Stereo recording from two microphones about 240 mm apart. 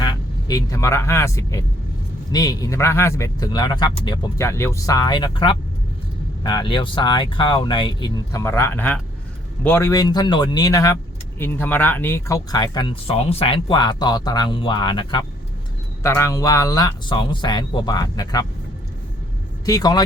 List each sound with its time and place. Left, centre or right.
0.0 s speech: centre
19.6 s speech: centre